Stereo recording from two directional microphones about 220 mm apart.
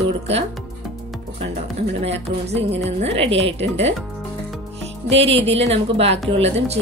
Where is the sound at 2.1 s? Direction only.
30° right (ahead or behind).